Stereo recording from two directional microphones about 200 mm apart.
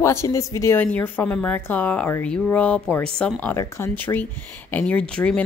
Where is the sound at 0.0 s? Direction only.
15° left (ahead or behind).